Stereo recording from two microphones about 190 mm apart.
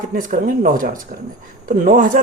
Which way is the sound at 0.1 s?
45° right (ahead or behind).